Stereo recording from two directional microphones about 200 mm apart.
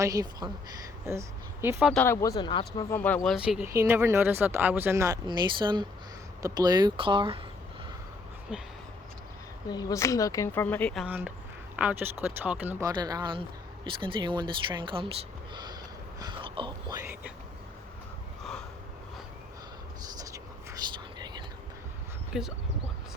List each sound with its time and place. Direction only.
0.0 s speech: 20° right (ahead or behind)
1.6 s speech: 10° right (ahead or behind)
1.9 s speech: 10° left (ahead or behind)
2.9 s speech: 10° left (ahead or behind)
3.3 s speech: 5° right (ahead or behind); by 7.3 s 25° right (ahead or behind)
8.5 s speech: 5° right (ahead or behind)
9.6 s speech: 20° left (ahead or behind)
11.0 s speech: 10° right (ahead or behind)
13.0 s speech: 20° right (ahead or behind)
15.5 s whispering: 20° right (ahead or behind)
20.1 s a sound: 15° right (ahead or behind)
22.3 s speech: centre (ahead or behind)